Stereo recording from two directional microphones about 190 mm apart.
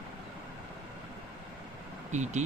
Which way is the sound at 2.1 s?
40° right (ahead or behind).